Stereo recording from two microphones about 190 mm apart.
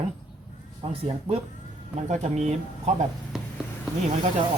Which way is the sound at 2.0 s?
40° right (ahead or behind).